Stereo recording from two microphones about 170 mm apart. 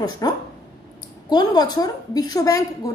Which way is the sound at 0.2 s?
20° left (ahead or behind).